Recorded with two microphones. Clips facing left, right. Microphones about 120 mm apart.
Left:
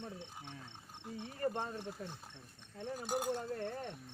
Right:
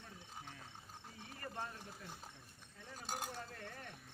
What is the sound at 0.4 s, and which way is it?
Insect, 25° left (ahead or behind).